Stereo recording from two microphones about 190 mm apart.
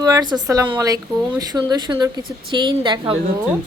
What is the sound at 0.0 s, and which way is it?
Speech, 20° right (ahead or behind).